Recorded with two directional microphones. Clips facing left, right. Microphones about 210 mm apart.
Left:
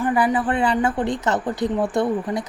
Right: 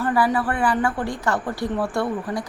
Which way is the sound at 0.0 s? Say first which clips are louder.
Left 1 dB; 15° left (ahead or behind).